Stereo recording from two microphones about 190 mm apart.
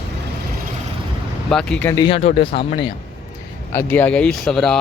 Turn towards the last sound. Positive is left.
turn(degrees=5)  # may be behind; listen again after turning